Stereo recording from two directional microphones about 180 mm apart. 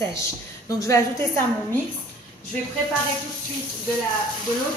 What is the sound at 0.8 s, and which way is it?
Speech, 15° left (ahead or behind).